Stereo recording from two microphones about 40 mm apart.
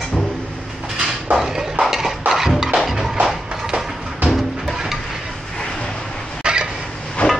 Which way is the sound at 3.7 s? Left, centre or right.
Right.